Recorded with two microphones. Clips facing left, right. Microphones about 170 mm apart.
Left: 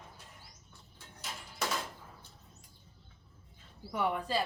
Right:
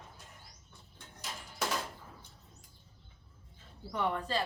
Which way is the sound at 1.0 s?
Centre (ahead or behind).